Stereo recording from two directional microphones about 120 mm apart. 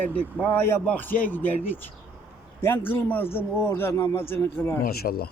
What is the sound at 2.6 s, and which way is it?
A man's voice, 15° left (ahead or behind).